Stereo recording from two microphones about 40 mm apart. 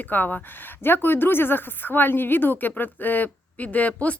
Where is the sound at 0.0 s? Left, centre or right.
Left.